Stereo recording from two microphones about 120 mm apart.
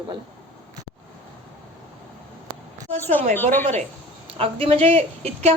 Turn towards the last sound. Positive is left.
turn(degrees=-55)  # may be behind; listen again after turning